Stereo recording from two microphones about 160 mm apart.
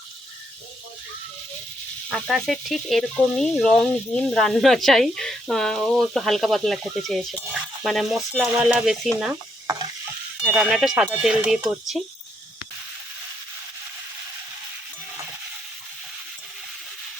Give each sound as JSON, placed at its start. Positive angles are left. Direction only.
{"t": 2.0, "sound": "frying", "side_deg": 0}
{"t": 10.4, "sound": "frying", "side_deg": -5}